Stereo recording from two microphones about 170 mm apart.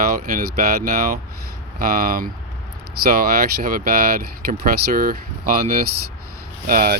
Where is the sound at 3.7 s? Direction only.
55° right (ahead or behind).